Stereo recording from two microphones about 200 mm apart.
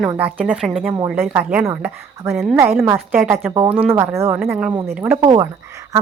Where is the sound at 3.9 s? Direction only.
10° right (ahead or behind).